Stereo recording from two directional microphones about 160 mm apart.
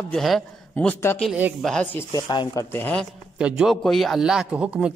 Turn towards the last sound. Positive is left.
turn(degrees=-5)  # may be behind; listen again after turning